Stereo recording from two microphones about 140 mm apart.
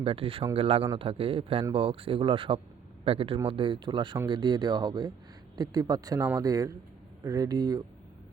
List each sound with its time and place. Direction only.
0.0 s speech: 40° right (ahead or behind)